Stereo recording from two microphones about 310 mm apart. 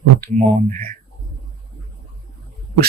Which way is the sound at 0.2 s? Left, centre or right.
Right.